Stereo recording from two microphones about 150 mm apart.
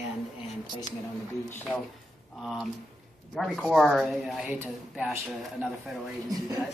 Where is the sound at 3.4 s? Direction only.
Centre (ahead or behind).